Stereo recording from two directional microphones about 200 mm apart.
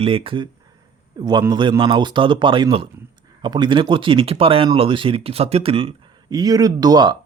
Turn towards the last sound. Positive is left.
turn(degrees=-20)  # may be behind; listen again after turning